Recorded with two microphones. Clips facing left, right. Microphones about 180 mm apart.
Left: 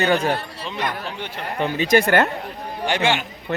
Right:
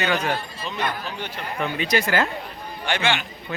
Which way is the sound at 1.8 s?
55° left (ahead or behind).